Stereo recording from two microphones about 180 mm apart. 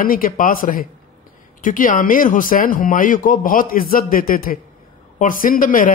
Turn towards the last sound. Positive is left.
turn(degrees=50)  # may be behind; listen again after turning